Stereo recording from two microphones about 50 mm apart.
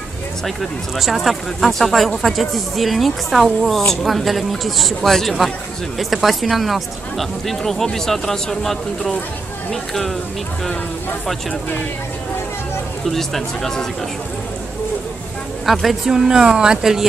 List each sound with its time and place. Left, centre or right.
0.6 s speech: centre
13.1 s speech: centre
15.6 s speech: centre